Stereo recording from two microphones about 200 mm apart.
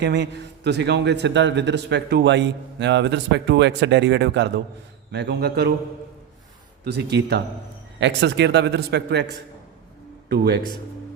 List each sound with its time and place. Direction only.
0.0 s a man's voice: 60° right (ahead or behind)
6.8 s a man's voice: 55° right (ahead or behind)